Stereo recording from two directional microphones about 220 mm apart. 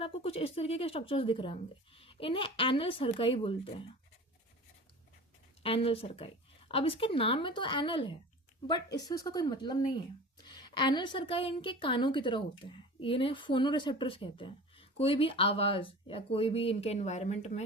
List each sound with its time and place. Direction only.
0.0 s a woman's voice: 25° left (ahead or behind)
5.6 s a woman's voice: 25° left (ahead or behind)